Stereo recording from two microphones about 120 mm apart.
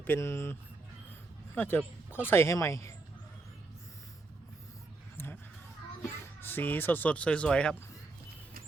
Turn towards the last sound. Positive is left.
turn(degrees=5)  # may be behind; listen again after turning